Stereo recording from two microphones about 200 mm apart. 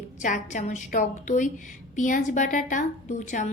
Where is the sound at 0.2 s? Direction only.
40° left (ahead or behind).